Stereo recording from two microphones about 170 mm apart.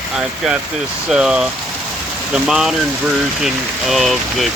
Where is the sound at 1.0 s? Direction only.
5° right (ahead or behind).